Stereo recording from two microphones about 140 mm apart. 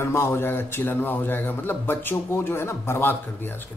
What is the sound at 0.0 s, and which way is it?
A man's voice, 20° left (ahead or behind).